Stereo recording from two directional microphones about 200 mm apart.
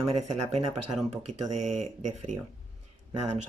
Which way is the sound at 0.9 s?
Centre (ahead or behind).